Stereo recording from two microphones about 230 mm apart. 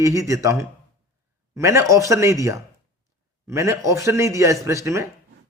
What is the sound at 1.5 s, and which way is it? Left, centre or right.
A man's voice, centre.